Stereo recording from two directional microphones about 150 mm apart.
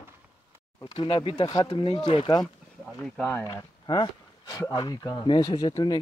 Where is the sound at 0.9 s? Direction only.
35° left (ahead or behind).